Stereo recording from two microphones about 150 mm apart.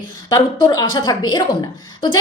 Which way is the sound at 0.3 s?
25° left (ahead or behind).